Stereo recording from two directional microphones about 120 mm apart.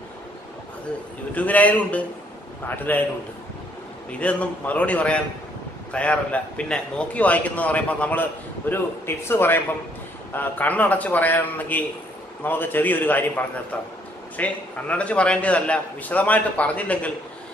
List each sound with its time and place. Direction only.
1.3 s a man's voice: 15° left (ahead or behind)
4.1 s a man's voice: 10° left (ahead or behind)